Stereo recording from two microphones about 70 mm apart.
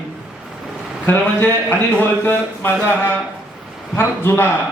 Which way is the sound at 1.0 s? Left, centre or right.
Left.